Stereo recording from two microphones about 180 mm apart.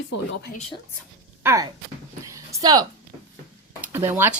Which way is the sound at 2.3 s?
15° right (ahead or behind).